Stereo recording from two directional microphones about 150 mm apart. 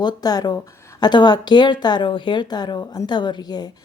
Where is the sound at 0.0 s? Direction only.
25° left (ahead or behind).